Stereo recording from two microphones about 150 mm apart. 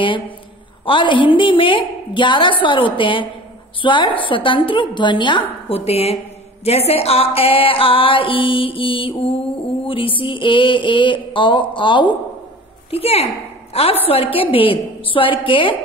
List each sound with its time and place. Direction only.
0.8 s music: 35° left (ahead or behind)
5.9 s speech: 45° left (ahead or behind)
6.6 s music: 45° left (ahead or behind)